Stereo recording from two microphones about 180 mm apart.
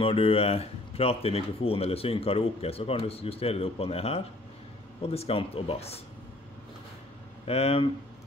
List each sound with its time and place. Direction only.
0.0 s speech: 30° left (ahead or behind)
7.4 s speech: 35° left (ahead or behind)